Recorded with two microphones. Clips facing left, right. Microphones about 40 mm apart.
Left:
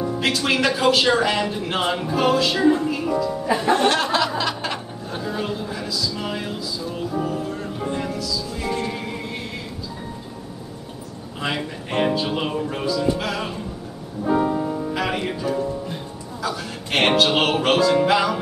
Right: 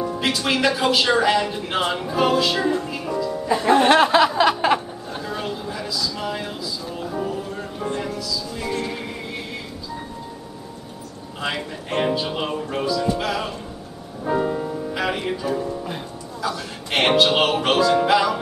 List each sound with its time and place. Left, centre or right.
0.0 s music: centre
0.4 s speech: centre
3.6 s chuckle: centre
5.1 s a sound: centre
7.6 s music: centre
11.4 s speech: centre
14.3 s music: centre
15.0 s speech: centre